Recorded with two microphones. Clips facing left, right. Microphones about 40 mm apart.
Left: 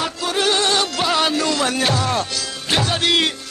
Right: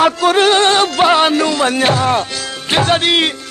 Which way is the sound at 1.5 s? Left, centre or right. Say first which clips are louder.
Right 5 dB; right.